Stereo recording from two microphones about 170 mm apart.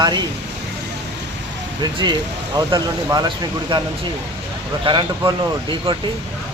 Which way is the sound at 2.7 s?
25° right (ahead or behind).